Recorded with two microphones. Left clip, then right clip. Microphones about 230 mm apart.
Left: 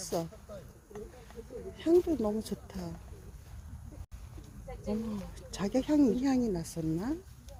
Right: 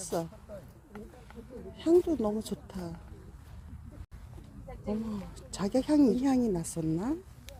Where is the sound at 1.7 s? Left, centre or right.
Centre.